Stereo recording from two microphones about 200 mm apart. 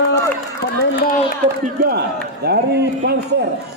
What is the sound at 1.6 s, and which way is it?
A man's voice, 50° right (ahead or behind).